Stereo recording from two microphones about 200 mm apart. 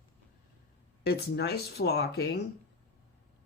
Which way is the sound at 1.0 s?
55° left (ahead or behind).